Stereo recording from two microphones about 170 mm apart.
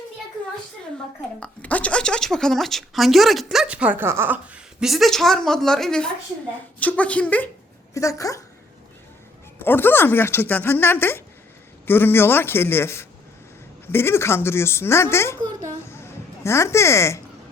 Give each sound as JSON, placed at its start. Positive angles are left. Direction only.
{"t": 1.4, "sound": "speech", "side_deg": 10}
{"t": 7.9, "sound": "speech", "side_deg": 20}
{"t": 9.6, "sound": "speech", "side_deg": 10}
{"t": 15.9, "sound": "a sound", "side_deg": 15}